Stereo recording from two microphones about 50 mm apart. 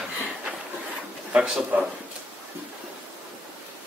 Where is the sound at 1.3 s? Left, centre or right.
Right.